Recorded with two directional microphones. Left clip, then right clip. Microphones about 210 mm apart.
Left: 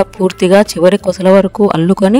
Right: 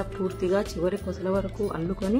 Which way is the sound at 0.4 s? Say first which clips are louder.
Left 18 dB; 50° left (ahead or behind).